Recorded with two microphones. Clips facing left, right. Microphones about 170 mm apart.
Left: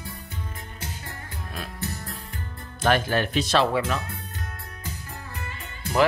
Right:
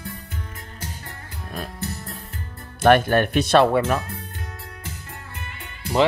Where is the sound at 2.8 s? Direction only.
55° right (ahead or behind).